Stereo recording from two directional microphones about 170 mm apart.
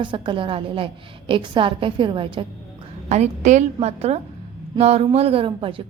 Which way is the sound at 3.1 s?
45° right (ahead or behind).